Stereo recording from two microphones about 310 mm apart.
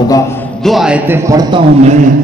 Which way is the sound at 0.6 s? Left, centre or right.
Centre.